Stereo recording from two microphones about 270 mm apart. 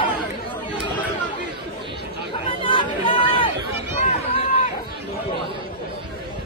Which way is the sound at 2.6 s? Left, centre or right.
Centre.